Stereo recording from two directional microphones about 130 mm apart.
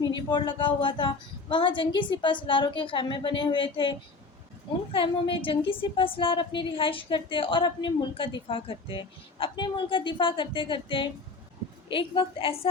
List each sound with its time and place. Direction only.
0.0 s a woman's voice: 35° left (ahead or behind)